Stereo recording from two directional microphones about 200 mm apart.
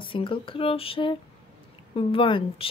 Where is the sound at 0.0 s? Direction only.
25° left (ahead or behind).